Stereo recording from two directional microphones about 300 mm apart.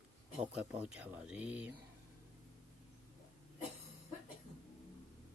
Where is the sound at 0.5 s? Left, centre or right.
Centre.